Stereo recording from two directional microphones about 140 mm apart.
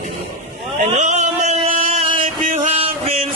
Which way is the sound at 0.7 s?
75° right (ahead or behind).